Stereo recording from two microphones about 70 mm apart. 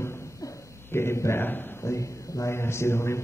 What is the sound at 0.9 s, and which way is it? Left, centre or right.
Speech, left.